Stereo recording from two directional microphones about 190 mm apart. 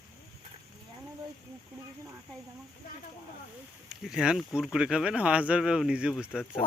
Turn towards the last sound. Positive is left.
turn(degrees=30)  # may be behind; listen again after turning